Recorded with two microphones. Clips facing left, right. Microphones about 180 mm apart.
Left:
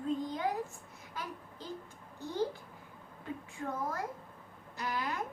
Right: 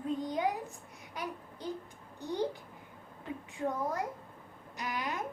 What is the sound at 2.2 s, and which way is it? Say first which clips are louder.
A child's voice: right 1 dB; 15° right (ahead or behind).